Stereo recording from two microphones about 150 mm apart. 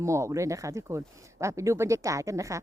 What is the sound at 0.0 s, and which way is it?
Speech, 20° right (ahead or behind).